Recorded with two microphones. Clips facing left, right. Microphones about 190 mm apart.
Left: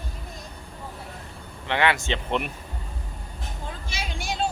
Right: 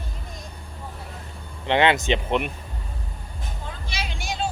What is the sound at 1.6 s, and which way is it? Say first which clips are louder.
Speech: right 4 dB; 20° right (ahead or behind).